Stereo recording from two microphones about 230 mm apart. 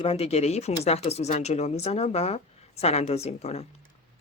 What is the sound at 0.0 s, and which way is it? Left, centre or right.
Speech, left.